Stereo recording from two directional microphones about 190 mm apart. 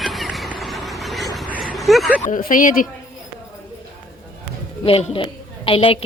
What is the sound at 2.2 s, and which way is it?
Speech, 45° left (ahead or behind).